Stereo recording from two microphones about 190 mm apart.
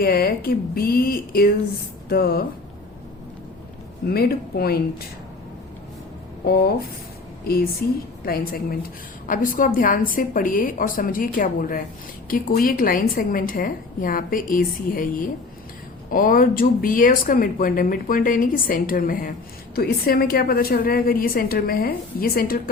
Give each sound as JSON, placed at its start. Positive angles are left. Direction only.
{"t": 0.0, "sound": "speech", "side_deg": 50}
{"t": 4.0, "sound": "speech", "side_deg": 55}
{"t": 6.4, "sound": "speech", "side_deg": 55}